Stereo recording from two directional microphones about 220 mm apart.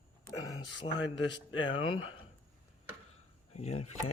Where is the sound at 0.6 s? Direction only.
55° left (ahead or behind).